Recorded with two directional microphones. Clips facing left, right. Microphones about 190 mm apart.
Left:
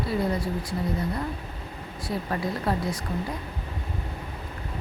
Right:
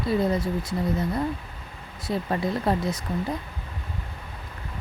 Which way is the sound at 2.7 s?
25° right (ahead or behind).